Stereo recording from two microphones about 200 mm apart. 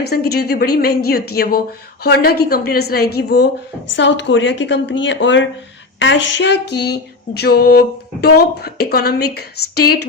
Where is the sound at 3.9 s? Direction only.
60° left (ahead or behind).